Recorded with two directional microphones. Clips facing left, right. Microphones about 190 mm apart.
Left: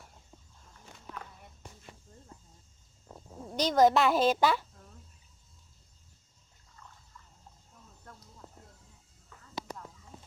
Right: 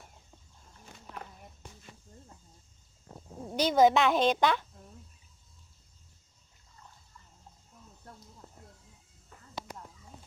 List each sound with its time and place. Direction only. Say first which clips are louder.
1.1 s walk: right 1 dB; 35° right (ahead or behind)
3.5 s a woman's voice: right 1 dB; 5° right (ahead or behind)